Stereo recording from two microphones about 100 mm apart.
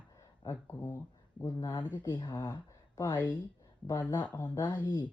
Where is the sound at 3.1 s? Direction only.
15° right (ahead or behind).